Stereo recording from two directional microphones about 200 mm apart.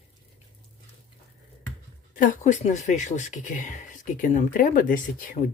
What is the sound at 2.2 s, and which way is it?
Speech, 40° left (ahead or behind).